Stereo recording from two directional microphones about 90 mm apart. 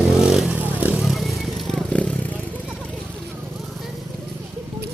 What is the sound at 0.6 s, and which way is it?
Vehicle, 20° right (ahead or behind).